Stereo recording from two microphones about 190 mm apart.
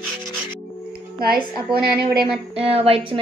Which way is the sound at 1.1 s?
50° right (ahead or behind).